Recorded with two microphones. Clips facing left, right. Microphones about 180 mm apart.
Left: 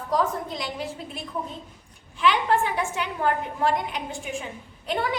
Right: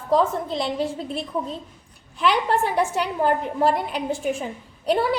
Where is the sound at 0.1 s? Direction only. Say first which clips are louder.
Right 5 dB; 30° right (ahead or behind).